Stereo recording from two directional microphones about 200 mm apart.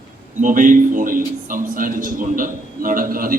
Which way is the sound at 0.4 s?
40° right (ahead or behind).